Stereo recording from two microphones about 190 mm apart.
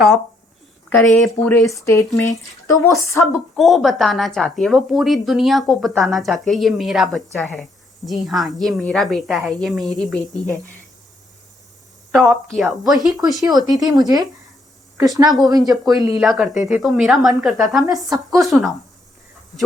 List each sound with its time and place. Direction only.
0.9 s speech: 5° left (ahead or behind)
3.5 s a woman's voice: centre (ahead or behind)
12.1 s a woman's voice: centre (ahead or behind)
13.7 s a woman's voice: 20° right (ahead or behind)
15.7 s a woman's voice: centre (ahead or behind)